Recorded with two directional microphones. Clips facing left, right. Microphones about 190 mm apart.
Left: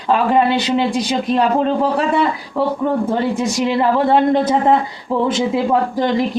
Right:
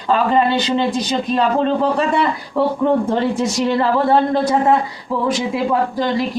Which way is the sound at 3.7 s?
15° left (ahead or behind).